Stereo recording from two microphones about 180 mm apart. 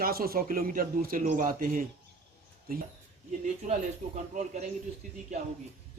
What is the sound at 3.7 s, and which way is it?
Speech, 40° right (ahead or behind).